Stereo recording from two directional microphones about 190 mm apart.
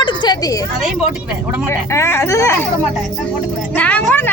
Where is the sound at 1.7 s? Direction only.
15° left (ahead or behind).